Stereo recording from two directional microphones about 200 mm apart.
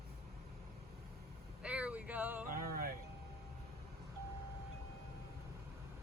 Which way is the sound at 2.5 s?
45° right (ahead or behind).